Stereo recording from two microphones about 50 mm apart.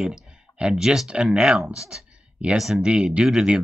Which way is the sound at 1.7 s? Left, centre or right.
Centre.